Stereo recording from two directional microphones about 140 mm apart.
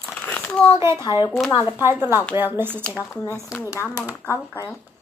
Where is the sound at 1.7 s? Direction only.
15° right (ahead or behind).